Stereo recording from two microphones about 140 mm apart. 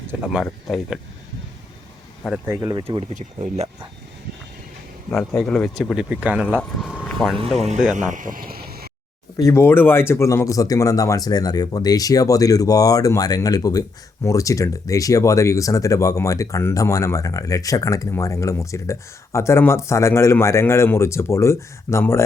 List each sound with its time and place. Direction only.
0.3 s speech: centre (ahead or behind)
2.5 s speech: 25° right (ahead or behind)
3.2 s speech: 55° right (ahead or behind)
5.4 s speech: 5° left (ahead or behind)
5.9 s speech: 5° right (ahead or behind)
6.6 s speech: 5° left (ahead or behind)
6.9 s vehicle: centre (ahead or behind)
7.9 s vehicle: 65° right (ahead or behind); by 8.9 s 90° right
9.4 s speech: 20° left (ahead or behind)